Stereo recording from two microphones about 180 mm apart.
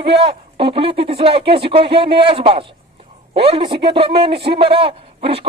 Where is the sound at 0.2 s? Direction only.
30° right (ahead or behind).